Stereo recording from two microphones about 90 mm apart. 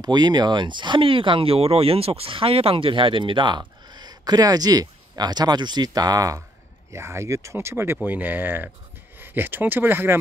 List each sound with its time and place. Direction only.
0.0 s speech: 50° right (ahead or behind)
6.9 s speech: 30° right (ahead or behind)